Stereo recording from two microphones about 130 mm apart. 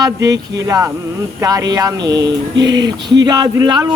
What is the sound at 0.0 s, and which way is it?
Speech, 25° right (ahead or behind).